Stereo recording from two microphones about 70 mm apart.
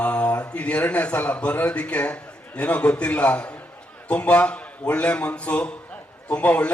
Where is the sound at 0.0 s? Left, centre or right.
Centre.